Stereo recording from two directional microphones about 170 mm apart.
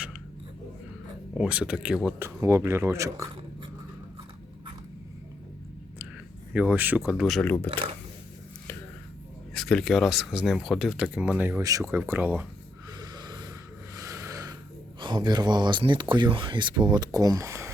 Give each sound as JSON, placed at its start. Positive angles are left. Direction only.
{"t": 1.4, "sound": "speech", "side_deg": -5}
{"t": 6.5, "sound": "speech", "side_deg": -10}
{"t": 9.6, "sound": "speech", "side_deg": 0}
{"t": 13.0, "sound": "snort", "side_deg": -25}
{"t": 13.9, "sound": "a sound", "side_deg": -20}
{"t": 15.0, "sound": "speech", "side_deg": -25}